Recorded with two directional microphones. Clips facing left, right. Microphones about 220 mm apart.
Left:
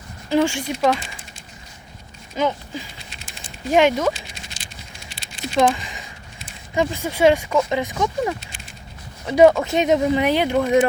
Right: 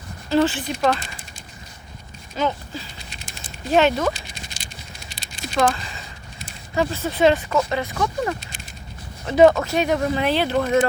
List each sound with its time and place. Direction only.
0.3 s speech: 15° left (ahead or behind)
2.3 s speech: 15° left (ahead or behind)
4.6 s rattle: 40° right (ahead or behind)
5.5 s speech: 15° left (ahead or behind)